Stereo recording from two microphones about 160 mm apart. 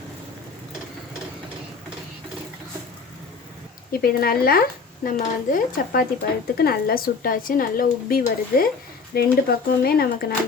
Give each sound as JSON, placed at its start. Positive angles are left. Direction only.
{"t": 4.0, "sound": "speech", "side_deg": 70}